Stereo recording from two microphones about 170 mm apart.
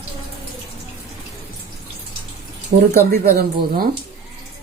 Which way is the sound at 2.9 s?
65° right (ahead or behind).